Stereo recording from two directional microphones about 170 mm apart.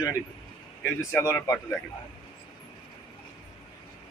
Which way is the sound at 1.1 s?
20° left (ahead or behind).